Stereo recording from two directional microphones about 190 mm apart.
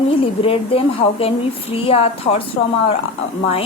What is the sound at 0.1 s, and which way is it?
Speech, 30° left (ahead or behind).